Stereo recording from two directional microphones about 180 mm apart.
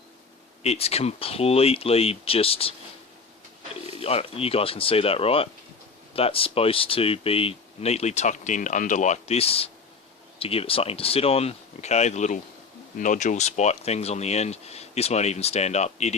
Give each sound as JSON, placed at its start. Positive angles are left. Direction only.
{"t": 0.6, "sound": "speech", "side_deg": 35}
{"t": 4.0, "sound": "speech", "side_deg": 35}